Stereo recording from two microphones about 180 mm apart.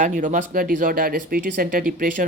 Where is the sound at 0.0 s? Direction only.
45° right (ahead or behind).